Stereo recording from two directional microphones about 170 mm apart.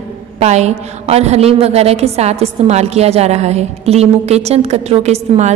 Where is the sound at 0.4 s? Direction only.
40° right (ahead or behind).